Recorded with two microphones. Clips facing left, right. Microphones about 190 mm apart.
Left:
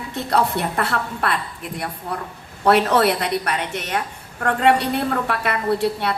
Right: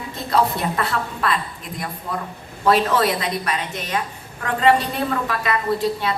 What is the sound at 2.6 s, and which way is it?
A woman's voice, 70° left (ahead or behind).